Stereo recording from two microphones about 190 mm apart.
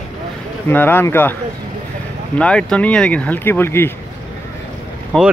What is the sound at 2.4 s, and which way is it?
Speech, 5° left (ahead or behind).